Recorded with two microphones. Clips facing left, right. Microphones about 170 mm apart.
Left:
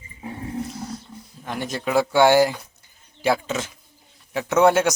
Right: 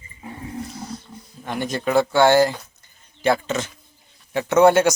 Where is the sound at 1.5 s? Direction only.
Centre (ahead or behind).